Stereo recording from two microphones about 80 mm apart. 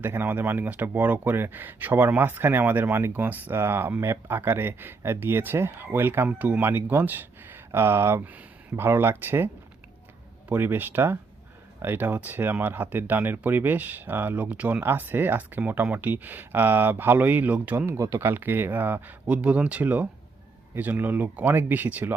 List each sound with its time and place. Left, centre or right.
0.0 s speech: right
10.5 s speech: right
17.8 s speech: right